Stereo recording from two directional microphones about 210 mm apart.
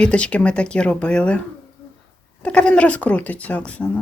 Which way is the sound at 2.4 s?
5° left (ahead or behind).